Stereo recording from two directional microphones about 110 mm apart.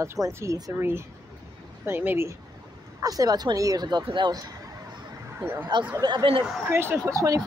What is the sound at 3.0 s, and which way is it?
Speech, 35° right (ahead or behind).